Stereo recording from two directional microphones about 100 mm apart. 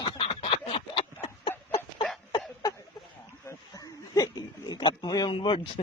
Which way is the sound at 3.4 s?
40° left (ahead or behind).